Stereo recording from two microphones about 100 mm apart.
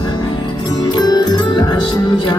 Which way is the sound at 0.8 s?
40° left (ahead or behind).